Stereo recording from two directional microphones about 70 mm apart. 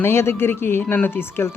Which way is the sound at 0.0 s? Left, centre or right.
Left.